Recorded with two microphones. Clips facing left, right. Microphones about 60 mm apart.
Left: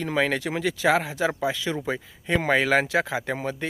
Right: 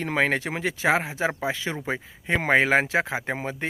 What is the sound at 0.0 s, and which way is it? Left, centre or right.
Speech, right.